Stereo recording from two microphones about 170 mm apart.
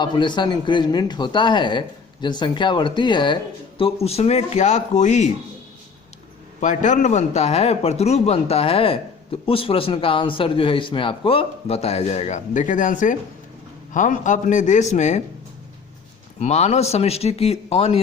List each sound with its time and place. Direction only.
0.0 s a man's voice: 25° left (ahead or behind); by 5.3 s 45° left (ahead or behind)
6.6 s a man's voice: 45° left (ahead or behind)
16.4 s a man's voice: 40° left (ahead or behind)